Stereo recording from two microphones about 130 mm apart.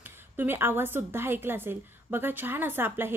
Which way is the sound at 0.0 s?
15° right (ahead or behind).